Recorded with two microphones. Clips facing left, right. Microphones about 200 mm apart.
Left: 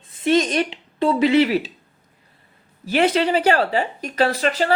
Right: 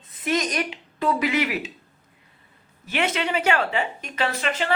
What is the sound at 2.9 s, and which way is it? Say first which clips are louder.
Speech: left 7 dB; 35° left (ahead or behind).